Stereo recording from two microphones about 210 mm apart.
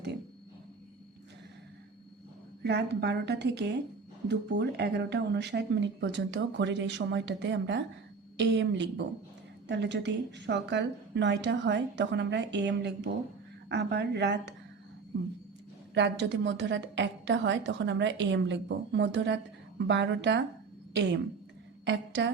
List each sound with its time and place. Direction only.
2.6 s a woman's voice: 55° right (ahead or behind)
16.0 s speech: 55° right (ahead or behind)
21.8 s a woman's voice: 60° right (ahead or behind)